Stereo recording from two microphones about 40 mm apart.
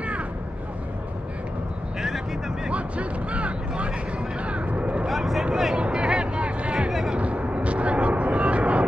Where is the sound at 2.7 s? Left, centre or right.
Right.